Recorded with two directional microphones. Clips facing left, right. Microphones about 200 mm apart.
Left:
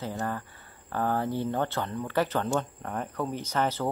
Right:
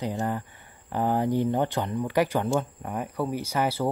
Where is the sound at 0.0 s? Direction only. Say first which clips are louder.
Right 4 dB; 15° right (ahead or behind).